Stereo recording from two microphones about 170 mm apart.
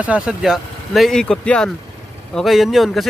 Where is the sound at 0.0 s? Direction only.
5° right (ahead or behind).